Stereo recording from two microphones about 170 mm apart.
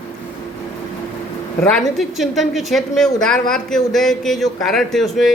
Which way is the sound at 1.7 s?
Centre (ahead or behind).